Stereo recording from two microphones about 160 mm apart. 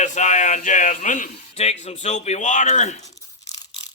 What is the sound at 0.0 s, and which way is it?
Speech, 50° left (ahead or behind).